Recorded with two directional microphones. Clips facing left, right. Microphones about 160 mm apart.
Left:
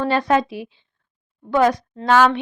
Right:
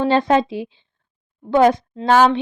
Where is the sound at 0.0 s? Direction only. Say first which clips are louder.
Right 3 dB; 25° right (ahead or behind).